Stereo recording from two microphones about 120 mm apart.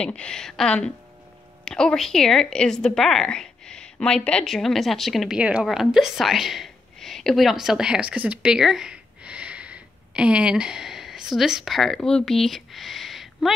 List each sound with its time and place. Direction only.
0.0 s a woman's voice: 10° left (ahead or behind)